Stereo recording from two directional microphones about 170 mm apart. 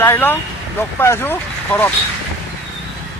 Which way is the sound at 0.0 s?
10° left (ahead or behind).